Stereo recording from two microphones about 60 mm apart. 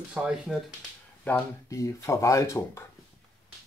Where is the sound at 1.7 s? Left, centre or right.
Left.